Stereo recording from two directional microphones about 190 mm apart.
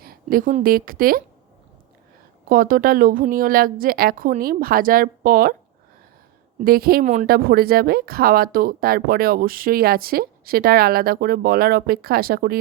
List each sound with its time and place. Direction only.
0.0 s a sound: 50° right (ahead or behind)
0.6 s speech: 50° right (ahead or behind)
2.5 s speech: 45° right (ahead or behind)
6.6 s speech: 50° right (ahead or behind)